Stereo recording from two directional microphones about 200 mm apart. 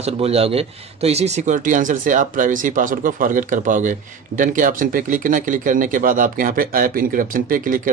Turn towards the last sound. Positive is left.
turn(degrees=-45)  # may be behind; listen again after turning